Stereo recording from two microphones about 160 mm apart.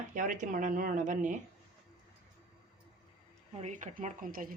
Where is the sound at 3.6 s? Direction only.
50° right (ahead or behind).